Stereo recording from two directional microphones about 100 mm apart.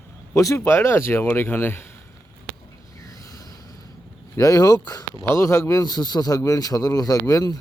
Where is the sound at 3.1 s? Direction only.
35° left (ahead or behind).